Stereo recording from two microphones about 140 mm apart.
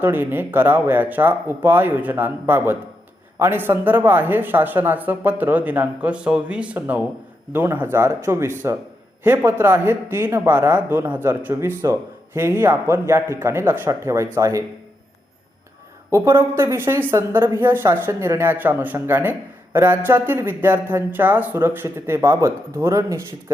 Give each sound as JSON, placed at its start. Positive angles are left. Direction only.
{"t": 0.0, "sound": "speech", "side_deg": -15}
{"t": 16.0, "sound": "speech", "side_deg": -20}